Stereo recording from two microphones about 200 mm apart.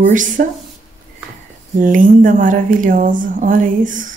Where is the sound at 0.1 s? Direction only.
40° right (ahead or behind).